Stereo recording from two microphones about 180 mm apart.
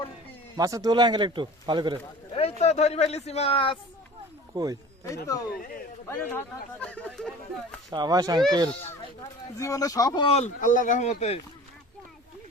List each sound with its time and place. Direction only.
0.5 s speech: 20° right (ahead or behind)
2.3 s speech: 35° left (ahead or behind)
4.5 s speech: 20° right (ahead or behind)
5.0 s speech: 15° left (ahead or behind)
7.9 s speech: 20° right (ahead or behind)
9.6 s speech: 20° left (ahead or behind); by 11.3 s 40° left (ahead or behind)